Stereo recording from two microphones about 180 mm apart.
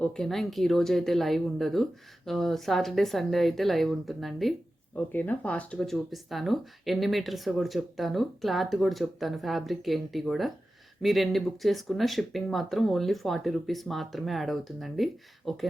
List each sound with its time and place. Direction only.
0.0 s speech: centre (ahead or behind)